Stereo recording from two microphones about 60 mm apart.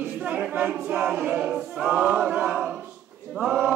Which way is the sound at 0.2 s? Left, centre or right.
Centre.